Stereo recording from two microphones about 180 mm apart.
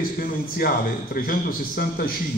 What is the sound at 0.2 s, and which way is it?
A man's voice, 55° left (ahead or behind).